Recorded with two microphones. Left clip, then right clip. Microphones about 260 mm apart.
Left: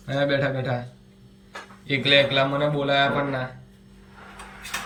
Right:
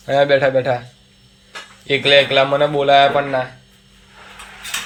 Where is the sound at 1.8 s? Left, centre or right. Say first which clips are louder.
Right 6 dB; centre.